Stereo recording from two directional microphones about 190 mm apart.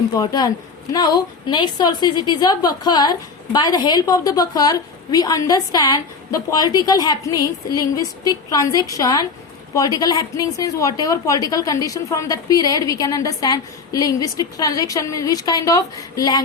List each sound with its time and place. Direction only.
0.1 s a woman's voice: 20° left (ahead or behind)